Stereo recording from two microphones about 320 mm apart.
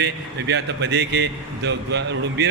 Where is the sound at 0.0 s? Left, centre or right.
Right.